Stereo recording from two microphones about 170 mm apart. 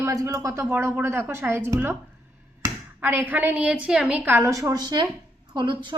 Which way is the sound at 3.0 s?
10° right (ahead or behind).